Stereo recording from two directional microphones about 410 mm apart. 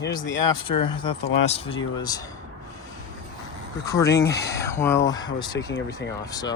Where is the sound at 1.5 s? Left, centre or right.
Centre.